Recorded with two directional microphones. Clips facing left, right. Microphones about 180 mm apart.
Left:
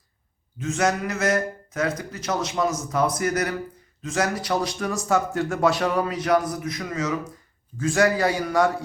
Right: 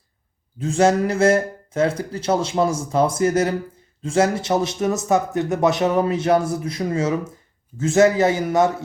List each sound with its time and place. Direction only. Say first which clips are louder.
0.6 s speech: right 6 dB; 30° right (ahead or behind)